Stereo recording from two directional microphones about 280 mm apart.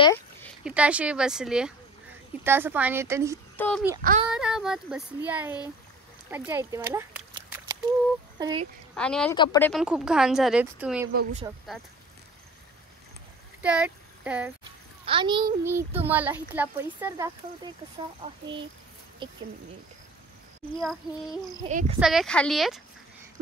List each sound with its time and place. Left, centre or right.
0.0 s speech: centre
3.5 s a child's voice: centre
8.9 s speech: centre
9.7 s speech: centre
13.6 s a sound: centre
15.0 s speech: centre
19.2 s speech: centre
20.8 s speech: centre
21.5 s speech: right
22.0 s speech: centre